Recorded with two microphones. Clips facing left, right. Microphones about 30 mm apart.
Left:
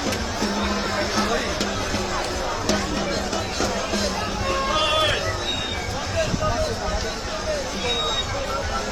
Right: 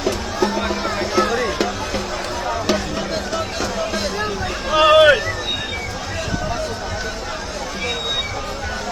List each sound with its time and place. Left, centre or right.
1.2 s music: right
3.3 s run: centre
4.7 s a sound: centre